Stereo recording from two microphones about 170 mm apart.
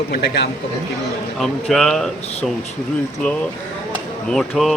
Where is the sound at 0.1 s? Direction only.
80° left.